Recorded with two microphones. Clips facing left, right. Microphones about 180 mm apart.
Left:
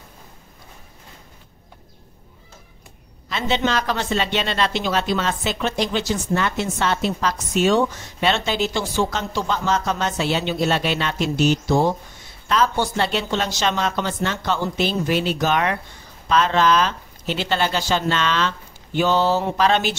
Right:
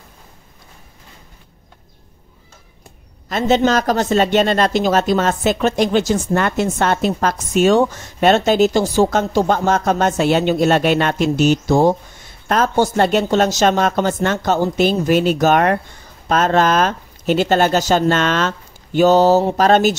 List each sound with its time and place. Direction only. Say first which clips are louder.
3.3 s speech: right 7 dB; 45° right (ahead or behind)